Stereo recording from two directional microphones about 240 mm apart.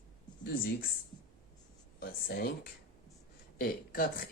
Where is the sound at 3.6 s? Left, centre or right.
Left.